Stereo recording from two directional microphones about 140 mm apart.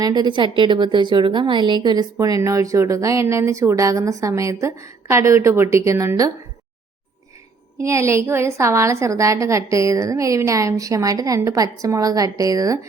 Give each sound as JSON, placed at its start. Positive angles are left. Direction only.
{"t": 0.0, "sound": "a woman's voice", "side_deg": -30}
{"t": 7.8, "sound": "a woman's voice", "side_deg": -20}